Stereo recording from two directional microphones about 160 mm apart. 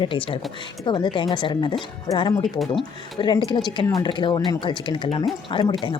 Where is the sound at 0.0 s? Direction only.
30° left (ahead or behind).